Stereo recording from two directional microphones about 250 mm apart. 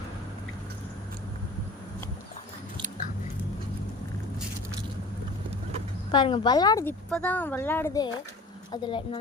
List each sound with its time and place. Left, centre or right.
6.1 s a woman's voice: centre